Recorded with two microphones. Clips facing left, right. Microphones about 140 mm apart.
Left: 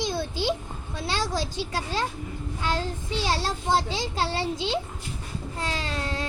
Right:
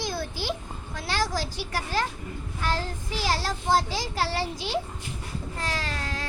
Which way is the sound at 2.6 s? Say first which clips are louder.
Left 1 dB; 20° left (ahead or behind).